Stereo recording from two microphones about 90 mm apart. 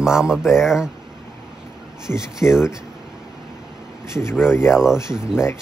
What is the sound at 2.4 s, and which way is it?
Speech, 25° left (ahead or behind).